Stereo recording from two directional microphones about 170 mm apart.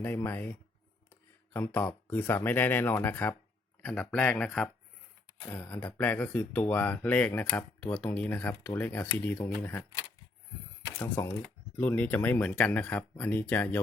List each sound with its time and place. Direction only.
0.0 s speech: 15° left (ahead or behind)
1.5 s speech: 10° left (ahead or behind)
10.8 s speech: 20° left (ahead or behind)